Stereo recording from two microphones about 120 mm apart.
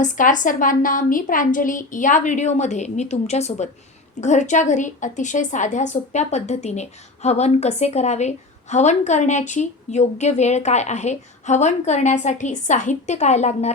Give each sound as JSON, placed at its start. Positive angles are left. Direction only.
{"t": 0.0, "sound": "a woman's voice", "side_deg": 90}
{"t": 4.2, "sound": "a woman's voice", "side_deg": 85}